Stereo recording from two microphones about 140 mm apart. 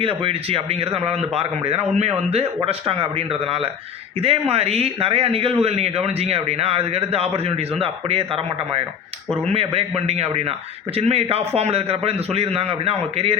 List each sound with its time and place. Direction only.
0.0 s speech: 40° right (ahead or behind)
9.5 s speech: 45° right (ahead or behind)